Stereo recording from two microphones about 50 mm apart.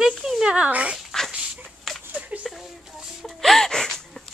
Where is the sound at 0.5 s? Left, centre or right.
Right.